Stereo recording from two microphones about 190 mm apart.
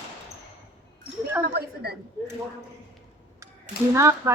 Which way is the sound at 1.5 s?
55° right (ahead or behind).